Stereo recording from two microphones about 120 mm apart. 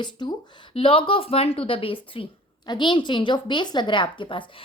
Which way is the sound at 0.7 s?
50° left (ahead or behind).